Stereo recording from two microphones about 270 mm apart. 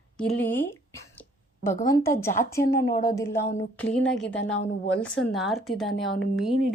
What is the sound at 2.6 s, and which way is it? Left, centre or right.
Speech, left.